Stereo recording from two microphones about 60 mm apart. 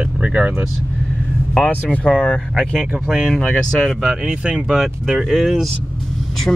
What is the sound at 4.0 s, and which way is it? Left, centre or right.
Speech, centre.